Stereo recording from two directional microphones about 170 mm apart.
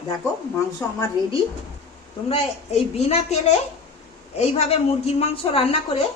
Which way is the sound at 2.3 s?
35° left (ahead or behind).